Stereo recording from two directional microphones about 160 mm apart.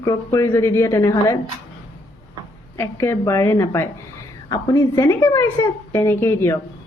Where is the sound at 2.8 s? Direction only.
15° left (ahead or behind).